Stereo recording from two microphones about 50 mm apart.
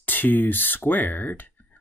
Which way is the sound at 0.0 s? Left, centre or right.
Left.